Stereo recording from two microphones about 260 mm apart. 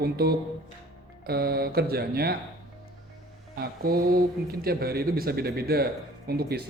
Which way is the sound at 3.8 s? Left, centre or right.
Right.